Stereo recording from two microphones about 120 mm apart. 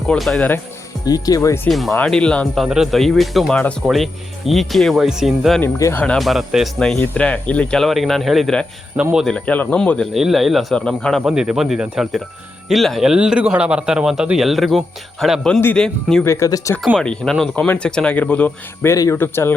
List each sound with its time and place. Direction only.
0.1 s a man's voice: 5° left (ahead or behind)
1.0 s speech: 30° left (ahead or behind)
2.0 s a man's voice: 5° left (ahead or behind)
5.6 s speech: 20° left (ahead or behind)
6.1 s a man's voice: centre (ahead or behind)
10.2 s a man's voice: centre (ahead or behind)
11.3 s a man's voice: 5° right (ahead or behind)
16.2 s speech: 25° left (ahead or behind)
17.0 s a man's voice: 5° left (ahead or behind)